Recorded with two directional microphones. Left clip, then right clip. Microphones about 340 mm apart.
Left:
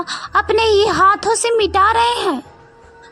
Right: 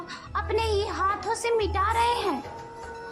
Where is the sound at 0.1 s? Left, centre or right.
Left.